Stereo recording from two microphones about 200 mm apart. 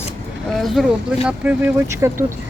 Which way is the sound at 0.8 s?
Centre (ahead or behind).